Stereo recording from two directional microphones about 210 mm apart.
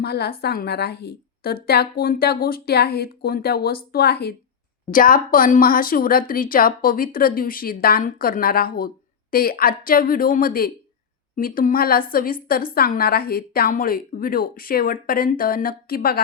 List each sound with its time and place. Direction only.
0.0 s a woman's voice: 50° left (ahead or behind)